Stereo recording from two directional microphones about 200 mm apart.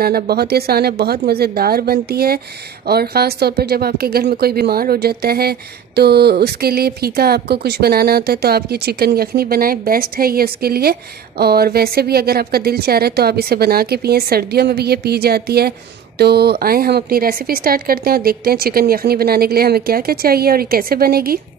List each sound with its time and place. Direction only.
0.0 s speech: 50° right (ahead or behind)